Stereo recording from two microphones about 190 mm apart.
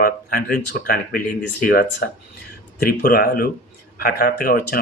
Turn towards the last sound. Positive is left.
turn(degrees=55)  # may be behind; listen again after turning